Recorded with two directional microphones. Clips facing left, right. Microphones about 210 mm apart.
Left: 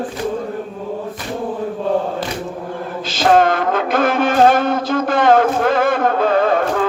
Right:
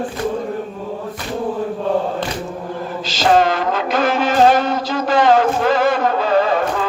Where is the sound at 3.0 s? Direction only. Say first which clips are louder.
Left 1 dB; 55° left (ahead or behind).